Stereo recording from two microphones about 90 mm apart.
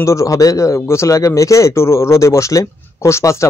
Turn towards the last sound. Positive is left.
turn(degrees=30)  # may be behind; listen again after turning